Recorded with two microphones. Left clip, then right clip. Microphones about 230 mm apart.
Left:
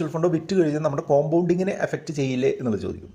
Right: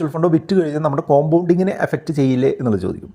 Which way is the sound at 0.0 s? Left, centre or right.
Right.